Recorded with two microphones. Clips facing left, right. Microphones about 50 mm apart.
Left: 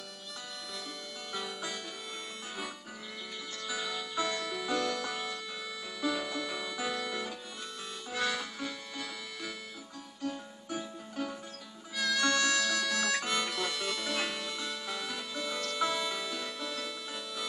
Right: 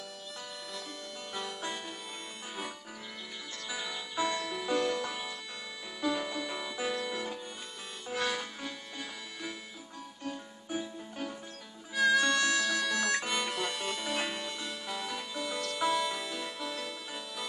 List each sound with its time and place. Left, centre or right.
1.3 s music: centre
3.6 s music: centre
4.8 s music: centre
5.1 s music: centre
10.8 s music: centre
11.9 s harmonica: centre